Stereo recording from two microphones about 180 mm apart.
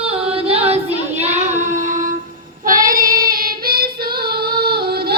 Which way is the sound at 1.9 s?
45° right (ahead or behind).